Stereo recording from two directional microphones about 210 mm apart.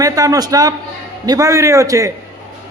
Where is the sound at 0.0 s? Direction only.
15° right (ahead or behind).